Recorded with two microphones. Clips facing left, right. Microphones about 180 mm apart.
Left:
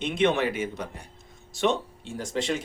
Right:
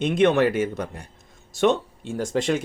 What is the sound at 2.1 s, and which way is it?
Speech, 50° right (ahead or behind).